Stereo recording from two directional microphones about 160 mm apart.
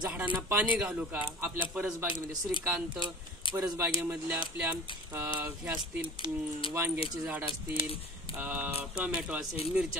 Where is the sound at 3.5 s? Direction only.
20° right (ahead or behind).